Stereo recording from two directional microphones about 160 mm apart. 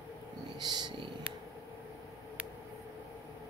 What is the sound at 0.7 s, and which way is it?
Purr, 25° right (ahead or behind).